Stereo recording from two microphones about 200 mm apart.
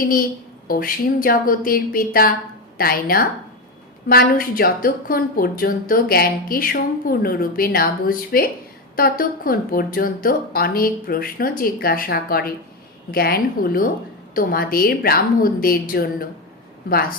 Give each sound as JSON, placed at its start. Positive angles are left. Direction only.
{"t": 0.0, "sound": "speech", "side_deg": 45}